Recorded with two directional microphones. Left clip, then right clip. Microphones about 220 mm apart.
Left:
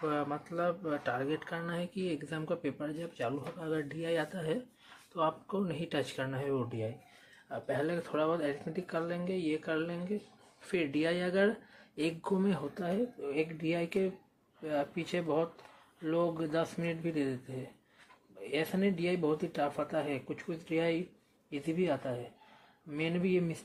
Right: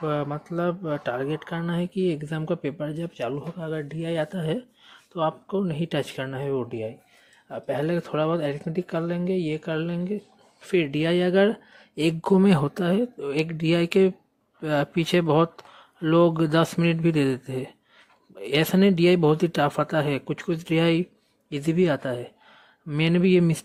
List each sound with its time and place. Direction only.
0.0 s speech: 40° right (ahead or behind)